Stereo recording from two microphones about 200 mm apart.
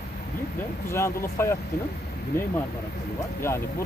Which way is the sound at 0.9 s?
15° left (ahead or behind).